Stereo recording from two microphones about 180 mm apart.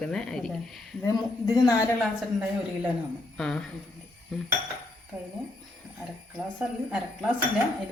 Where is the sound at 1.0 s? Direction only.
20° left (ahead or behind).